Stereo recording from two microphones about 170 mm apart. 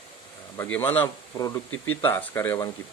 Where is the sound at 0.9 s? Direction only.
15° left (ahead or behind).